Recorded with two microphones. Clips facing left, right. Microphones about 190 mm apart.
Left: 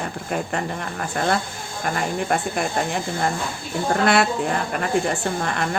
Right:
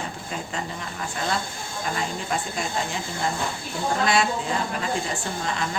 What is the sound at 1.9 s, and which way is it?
A woman's voice, 60° left (ahead or behind).